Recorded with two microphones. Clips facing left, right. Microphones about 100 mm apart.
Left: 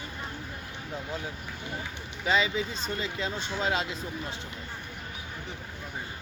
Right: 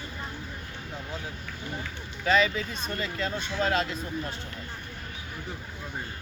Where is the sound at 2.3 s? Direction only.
20° left (ahead or behind).